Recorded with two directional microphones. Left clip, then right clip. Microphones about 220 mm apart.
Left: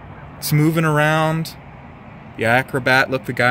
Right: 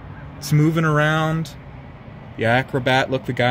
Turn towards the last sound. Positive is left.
turn(degrees=0)  # may be behind; listen again after turning